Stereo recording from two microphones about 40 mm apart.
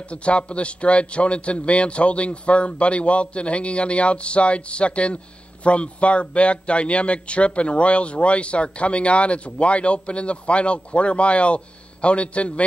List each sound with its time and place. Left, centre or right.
0.1 s a man's voice: left